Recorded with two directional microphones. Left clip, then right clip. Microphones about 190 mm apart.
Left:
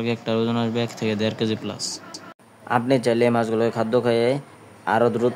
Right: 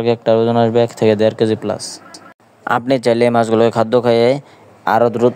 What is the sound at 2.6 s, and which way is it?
Speech, 50° right (ahead or behind).